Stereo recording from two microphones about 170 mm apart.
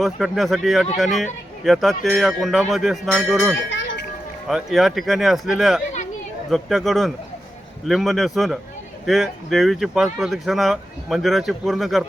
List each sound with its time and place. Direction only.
0.0 s speech: centre (ahead or behind)
3.7 s a sound: 90° left
4.4 s speech: centre (ahead or behind)